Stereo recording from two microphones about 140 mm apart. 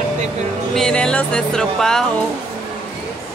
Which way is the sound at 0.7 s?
5° left (ahead or behind).